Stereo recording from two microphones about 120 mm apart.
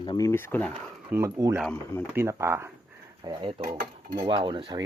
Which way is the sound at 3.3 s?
45° right (ahead or behind).